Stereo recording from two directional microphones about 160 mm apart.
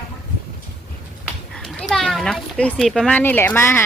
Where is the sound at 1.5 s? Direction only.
5° left (ahead or behind).